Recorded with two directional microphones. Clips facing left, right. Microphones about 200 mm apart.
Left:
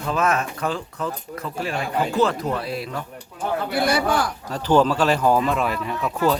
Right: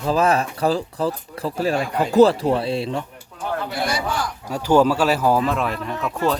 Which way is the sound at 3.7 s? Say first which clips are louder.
Left 7 dB; 60° left (ahead or behind).